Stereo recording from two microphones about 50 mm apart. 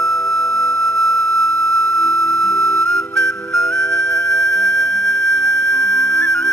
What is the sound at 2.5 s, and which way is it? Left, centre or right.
Music, centre.